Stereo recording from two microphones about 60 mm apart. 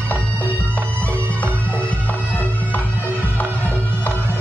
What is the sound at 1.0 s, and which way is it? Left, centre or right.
Bagpipes, left.